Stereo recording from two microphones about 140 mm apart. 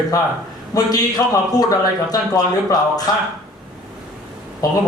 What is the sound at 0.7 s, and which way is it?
Speech, 25° left (ahead or behind).